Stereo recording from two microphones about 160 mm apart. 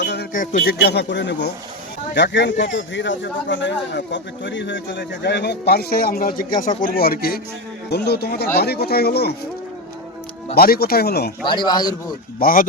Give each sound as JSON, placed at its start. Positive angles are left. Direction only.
{"t": 0.0, "sound": "a sound", "side_deg": 90}
{"t": 0.5, "sound": "a man's voice", "side_deg": 70}
{"t": 7.9, "sound": "a man's voice", "side_deg": 90}
{"t": 10.5, "sound": "speech", "side_deg": 75}
{"t": 11.4, "sound": "a man's voice", "side_deg": 30}
{"t": 12.4, "sound": "speech", "side_deg": 65}